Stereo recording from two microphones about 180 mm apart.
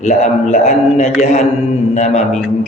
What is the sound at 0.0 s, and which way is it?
A man's voice, 40° left (ahead or behind).